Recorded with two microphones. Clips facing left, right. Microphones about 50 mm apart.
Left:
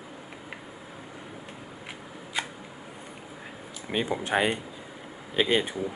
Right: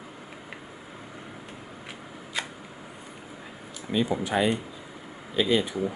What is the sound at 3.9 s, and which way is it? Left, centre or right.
Speech, left.